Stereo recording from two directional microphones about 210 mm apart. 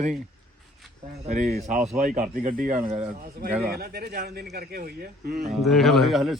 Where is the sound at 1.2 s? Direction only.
35° right (ahead or behind).